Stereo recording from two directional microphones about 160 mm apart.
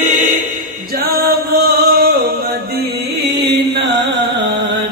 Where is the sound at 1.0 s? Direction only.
70° right (ahead or behind).